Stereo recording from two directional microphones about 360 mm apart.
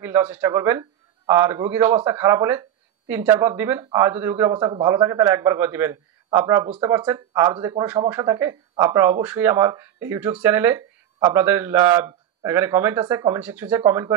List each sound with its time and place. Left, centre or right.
0.0 s a man's voice: centre